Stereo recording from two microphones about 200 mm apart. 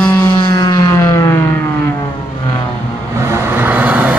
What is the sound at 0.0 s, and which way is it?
Vehicle, 10° left (ahead or behind).